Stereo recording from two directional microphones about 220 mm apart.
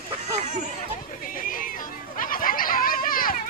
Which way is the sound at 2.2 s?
40° left (ahead or behind).